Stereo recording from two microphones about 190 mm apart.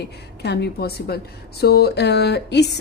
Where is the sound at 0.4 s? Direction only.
60° left (ahead or behind).